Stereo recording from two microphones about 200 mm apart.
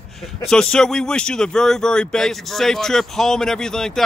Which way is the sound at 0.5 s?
5° left (ahead or behind).